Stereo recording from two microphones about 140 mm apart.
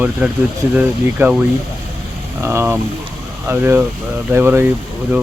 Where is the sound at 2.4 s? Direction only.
15° right (ahead or behind).